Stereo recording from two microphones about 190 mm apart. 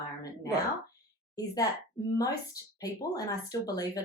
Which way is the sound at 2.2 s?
20° left (ahead or behind).